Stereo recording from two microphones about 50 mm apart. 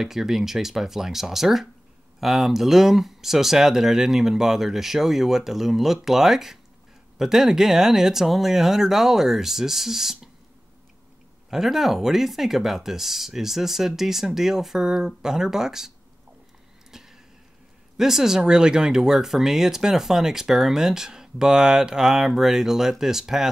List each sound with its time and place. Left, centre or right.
0.0 s speech: centre
11.5 s speech: centre
16.9 s a sound: centre
17.9 s speech: centre